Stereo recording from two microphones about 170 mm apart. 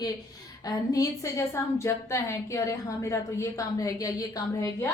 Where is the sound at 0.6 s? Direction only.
20° left (ahead or behind).